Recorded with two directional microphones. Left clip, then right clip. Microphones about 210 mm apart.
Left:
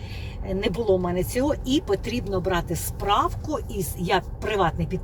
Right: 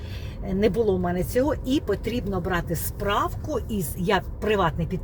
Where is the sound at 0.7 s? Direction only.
15° right (ahead or behind).